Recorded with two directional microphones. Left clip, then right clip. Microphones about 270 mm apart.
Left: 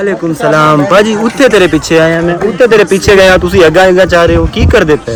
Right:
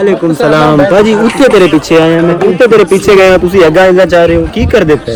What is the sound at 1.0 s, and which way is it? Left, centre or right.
A man's voice, centre.